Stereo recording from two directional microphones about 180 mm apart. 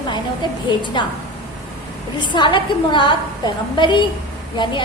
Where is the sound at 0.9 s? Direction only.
25° left (ahead or behind).